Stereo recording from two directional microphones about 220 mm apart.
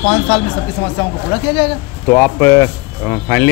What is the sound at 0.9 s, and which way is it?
Speech, 20° left (ahead or behind).